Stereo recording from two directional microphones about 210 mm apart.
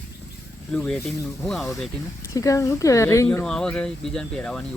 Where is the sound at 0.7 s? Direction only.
5° left (ahead or behind).